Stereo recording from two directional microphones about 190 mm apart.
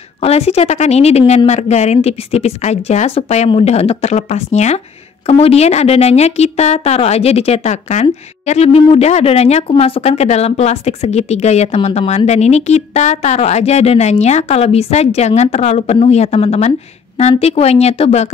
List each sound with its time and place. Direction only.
0.2 s a woman's voice: 35° left (ahead or behind)